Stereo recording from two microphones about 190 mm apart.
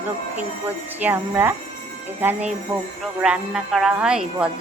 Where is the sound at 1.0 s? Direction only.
10° right (ahead or behind).